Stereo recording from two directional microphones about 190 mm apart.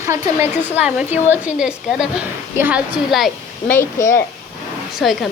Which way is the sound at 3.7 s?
15° left (ahead or behind).